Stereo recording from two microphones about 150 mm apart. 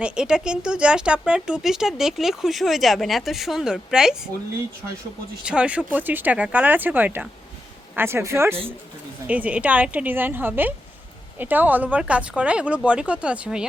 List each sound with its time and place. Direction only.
0.0 s speech: 5° right (ahead or behind)
5.5 s speech: 10° right (ahead or behind)